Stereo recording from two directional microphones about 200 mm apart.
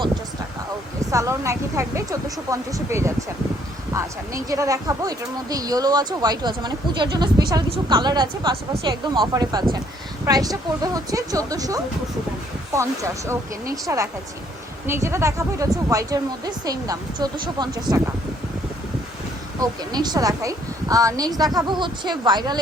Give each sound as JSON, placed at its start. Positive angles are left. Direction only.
{"t": 1.1, "sound": "speech", "side_deg": -15}
{"t": 4.4, "sound": "speech", "side_deg": -15}
{"t": 19.5, "sound": "speech", "side_deg": -20}